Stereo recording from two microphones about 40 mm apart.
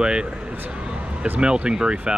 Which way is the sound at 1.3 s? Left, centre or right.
Right.